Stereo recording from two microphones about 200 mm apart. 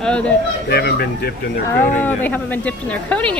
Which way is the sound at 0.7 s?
55° left (ahead or behind).